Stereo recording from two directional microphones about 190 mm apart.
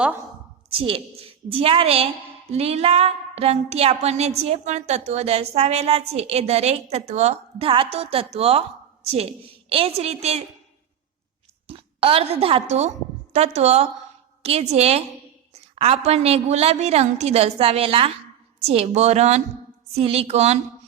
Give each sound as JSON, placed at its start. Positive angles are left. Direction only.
{"t": 0.8, "sound": "a woman's voice", "side_deg": -30}
{"t": 11.7, "sound": "a woman's voice", "side_deg": -30}